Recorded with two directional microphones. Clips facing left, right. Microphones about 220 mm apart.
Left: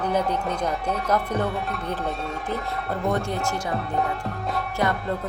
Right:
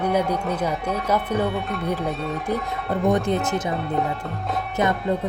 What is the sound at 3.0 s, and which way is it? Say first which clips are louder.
Speech: right 5 dB; 20° right (ahead or behind).